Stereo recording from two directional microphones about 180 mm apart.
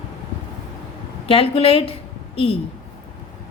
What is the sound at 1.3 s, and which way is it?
Speech, 30° left (ahead or behind).